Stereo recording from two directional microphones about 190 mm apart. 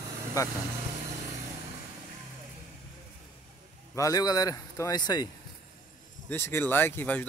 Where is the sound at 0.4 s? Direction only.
20° left (ahead or behind).